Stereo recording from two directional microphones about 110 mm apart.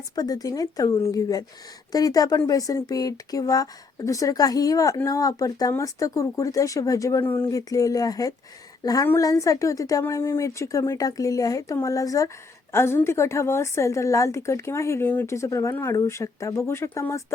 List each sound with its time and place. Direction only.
0.2 s a woman's voice: 35° left (ahead or behind)